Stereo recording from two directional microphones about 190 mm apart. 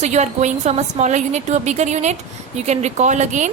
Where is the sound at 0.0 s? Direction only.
35° right (ahead or behind).